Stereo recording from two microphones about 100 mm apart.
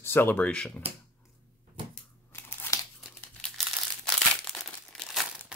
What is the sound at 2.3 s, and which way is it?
Crumpling, 25° left (ahead or behind).